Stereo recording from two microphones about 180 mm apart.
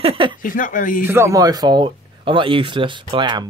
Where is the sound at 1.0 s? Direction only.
15° right (ahead or behind).